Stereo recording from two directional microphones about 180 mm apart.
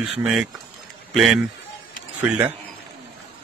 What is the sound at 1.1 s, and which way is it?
Speech, centre (ahead or behind).